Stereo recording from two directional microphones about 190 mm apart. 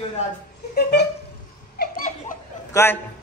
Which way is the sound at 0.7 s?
55° left (ahead or behind).